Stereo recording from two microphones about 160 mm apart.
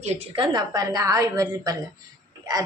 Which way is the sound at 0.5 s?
25° right (ahead or behind).